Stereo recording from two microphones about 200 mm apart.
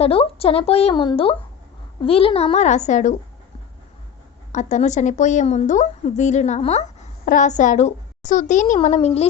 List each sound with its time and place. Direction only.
0.0 s a woman's voice: 30° left (ahead or behind)
4.5 s a woman's voice: 35° left (ahead or behind)